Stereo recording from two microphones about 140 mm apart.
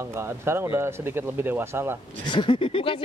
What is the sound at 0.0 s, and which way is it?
Speech, 20° right (ahead or behind).